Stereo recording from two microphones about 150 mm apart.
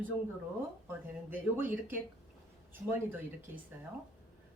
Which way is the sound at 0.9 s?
15° right (ahead or behind).